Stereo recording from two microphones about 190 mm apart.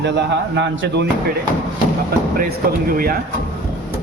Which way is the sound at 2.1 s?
55° right (ahead or behind).